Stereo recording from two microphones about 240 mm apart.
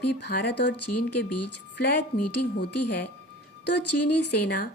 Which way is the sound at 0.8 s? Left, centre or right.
Left.